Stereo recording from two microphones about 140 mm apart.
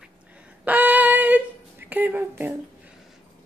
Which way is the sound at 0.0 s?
10° right (ahead or behind).